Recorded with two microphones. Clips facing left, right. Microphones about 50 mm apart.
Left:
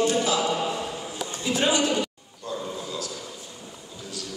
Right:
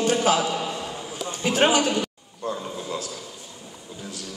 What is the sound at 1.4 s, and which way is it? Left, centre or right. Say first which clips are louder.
Speech: right 3 dB; right.